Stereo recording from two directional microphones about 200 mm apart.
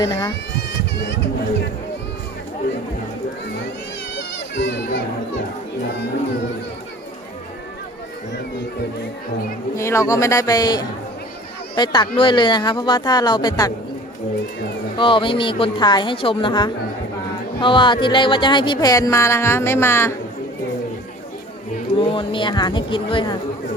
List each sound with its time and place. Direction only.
0.0 s speech: 15° left (ahead or behind)
4.1 s a child's voice: 60° left (ahead or behind)
9.7 s speech: 15° left (ahead or behind)
14.9 s speech: 25° left (ahead or behind)
21.9 s speech: 25° left (ahead or behind)